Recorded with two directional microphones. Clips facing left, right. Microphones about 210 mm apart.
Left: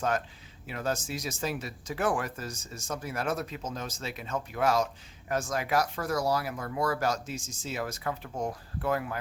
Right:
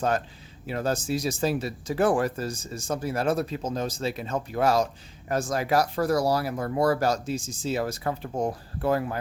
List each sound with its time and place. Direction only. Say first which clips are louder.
0.7 s speech: right 6 dB; 35° right (ahead or behind)